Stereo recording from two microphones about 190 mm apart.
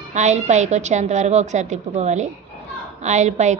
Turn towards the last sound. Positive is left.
turn(degrees=-35)  # may be behind; listen again after turning